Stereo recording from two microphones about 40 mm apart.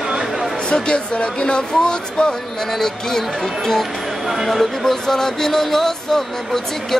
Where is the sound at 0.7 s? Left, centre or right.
Left.